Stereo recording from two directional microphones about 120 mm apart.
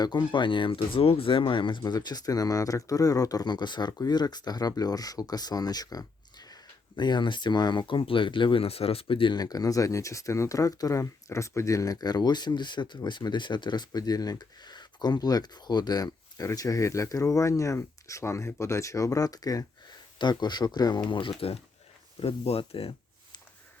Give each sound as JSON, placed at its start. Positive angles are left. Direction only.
{"t": 0.0, "sound": "speech", "side_deg": 40}